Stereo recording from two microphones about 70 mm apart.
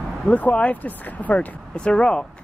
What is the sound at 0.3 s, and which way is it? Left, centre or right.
Speech, centre.